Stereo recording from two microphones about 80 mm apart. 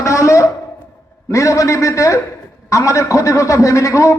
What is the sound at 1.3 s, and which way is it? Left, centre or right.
A man's voice, left.